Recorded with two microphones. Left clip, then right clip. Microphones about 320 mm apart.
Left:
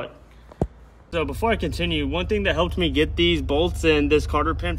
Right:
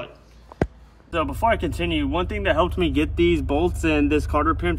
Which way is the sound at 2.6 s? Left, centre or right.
Centre.